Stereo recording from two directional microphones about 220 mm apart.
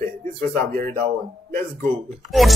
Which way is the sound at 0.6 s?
35° right (ahead or behind).